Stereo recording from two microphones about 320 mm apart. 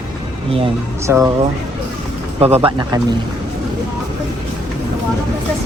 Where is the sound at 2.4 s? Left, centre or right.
Centre.